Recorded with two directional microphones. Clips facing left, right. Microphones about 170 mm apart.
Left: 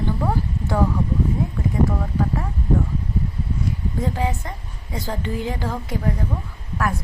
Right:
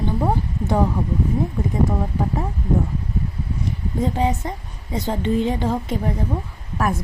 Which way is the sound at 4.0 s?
20° right (ahead or behind).